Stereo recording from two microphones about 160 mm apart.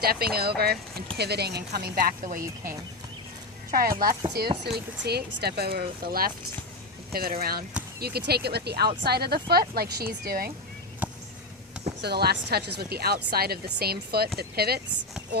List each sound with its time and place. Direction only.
0.0 s a woman's voice: 70° right (ahead or behind)
1.1 s a woman's voice: 90° right; by 3.9 s 65° right (ahead or behind)
4.6 s a woman's voice: 90° right
9.0 s a woman's voice: 80° right
11.0 s a sound: 10° right (ahead or behind)
12.0 s speech: 90° right